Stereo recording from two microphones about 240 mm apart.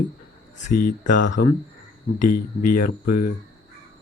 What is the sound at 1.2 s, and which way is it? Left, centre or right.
Speech, left.